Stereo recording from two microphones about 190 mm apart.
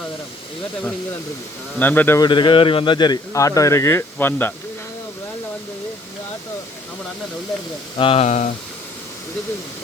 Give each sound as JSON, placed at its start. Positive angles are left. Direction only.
{"t": 1.8, "sound": "a man's voice", "side_deg": 10}
{"t": 2.2, "sound": "a man's voice", "side_deg": 25}
{"t": 7.9, "sound": "speech", "side_deg": 30}